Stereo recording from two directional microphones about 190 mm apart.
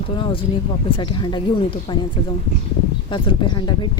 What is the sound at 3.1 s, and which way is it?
Speech, 25° left (ahead or behind).